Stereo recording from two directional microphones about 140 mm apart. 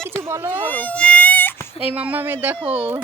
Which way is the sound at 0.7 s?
10° left (ahead or behind).